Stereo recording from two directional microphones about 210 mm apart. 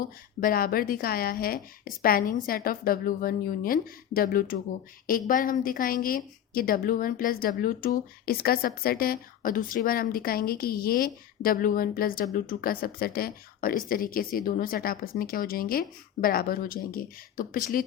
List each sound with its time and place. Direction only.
0.0 s a woman's voice: 40° left (ahead or behind)